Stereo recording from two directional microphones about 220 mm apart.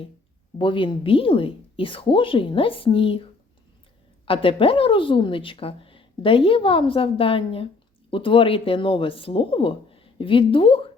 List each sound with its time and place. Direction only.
0.6 s speech: 20° left (ahead or behind)
4.3 s speech: 25° left (ahead or behind)